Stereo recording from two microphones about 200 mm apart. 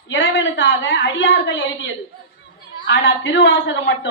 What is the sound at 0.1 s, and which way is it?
A woman's voice, 65° left (ahead or behind).